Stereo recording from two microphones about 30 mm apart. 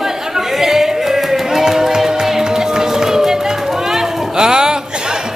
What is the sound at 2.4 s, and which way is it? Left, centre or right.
Run, right.